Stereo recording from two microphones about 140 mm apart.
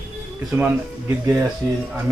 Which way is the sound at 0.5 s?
15° right (ahead or behind).